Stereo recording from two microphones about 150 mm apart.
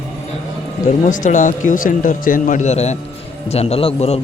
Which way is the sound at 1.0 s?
60° left (ahead or behind).